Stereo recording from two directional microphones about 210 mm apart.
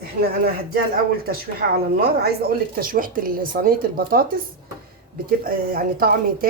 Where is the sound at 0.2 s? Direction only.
45° right (ahead or behind).